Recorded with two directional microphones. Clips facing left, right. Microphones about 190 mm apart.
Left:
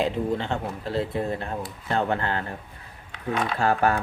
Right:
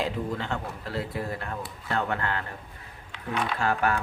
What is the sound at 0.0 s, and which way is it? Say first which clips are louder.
Speech: left 5 dB; 25° left (ahead or behind).